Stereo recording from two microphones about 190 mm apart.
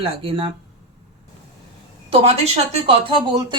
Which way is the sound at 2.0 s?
35° right (ahead or behind).